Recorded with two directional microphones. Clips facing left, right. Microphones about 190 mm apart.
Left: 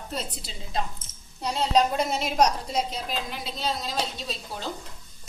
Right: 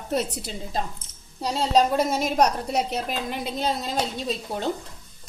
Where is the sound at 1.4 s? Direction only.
45° right (ahead or behind).